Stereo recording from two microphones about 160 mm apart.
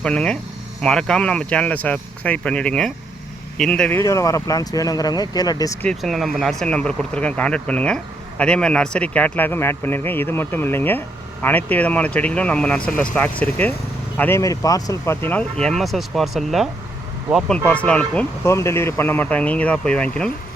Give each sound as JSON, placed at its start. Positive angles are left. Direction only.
{"t": 0.0, "sound": "speech", "side_deg": 5}
{"t": 4.0, "sound": "speech", "side_deg": 20}
{"t": 5.8, "sound": "speech", "side_deg": 5}
{"t": 17.7, "sound": "speech", "side_deg": 10}